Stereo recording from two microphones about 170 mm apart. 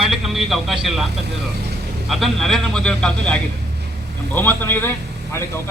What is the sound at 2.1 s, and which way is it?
A man's voice, centre (ahead or behind).